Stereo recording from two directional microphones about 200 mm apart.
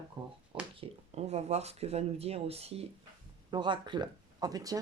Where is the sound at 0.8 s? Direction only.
30° right (ahead or behind).